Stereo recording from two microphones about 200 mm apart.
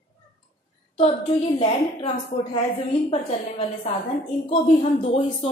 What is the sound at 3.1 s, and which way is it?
Speech, 25° left (ahead or behind).